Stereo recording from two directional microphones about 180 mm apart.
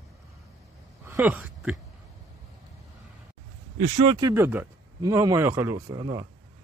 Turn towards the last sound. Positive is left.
turn(degrees=-25)  # may be behind; listen again after turning